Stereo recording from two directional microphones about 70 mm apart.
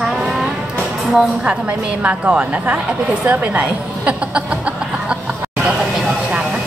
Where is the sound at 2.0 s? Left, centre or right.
Centre.